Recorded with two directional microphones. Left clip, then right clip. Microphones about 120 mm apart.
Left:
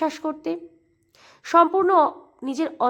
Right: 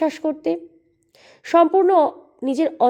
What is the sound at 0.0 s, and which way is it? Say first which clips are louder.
A woman's voice: right 4 dB; 25° right (ahead or behind).